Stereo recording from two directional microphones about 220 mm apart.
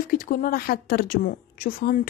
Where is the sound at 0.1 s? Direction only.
40° left (ahead or behind).